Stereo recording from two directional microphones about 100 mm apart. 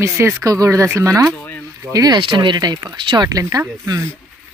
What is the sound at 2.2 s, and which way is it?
Speech, 55° right (ahead or behind).